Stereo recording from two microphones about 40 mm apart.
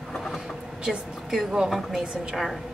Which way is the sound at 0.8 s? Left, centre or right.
Centre.